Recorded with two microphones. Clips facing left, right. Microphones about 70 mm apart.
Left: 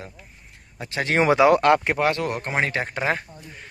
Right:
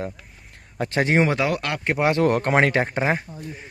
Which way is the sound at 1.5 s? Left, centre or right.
Left.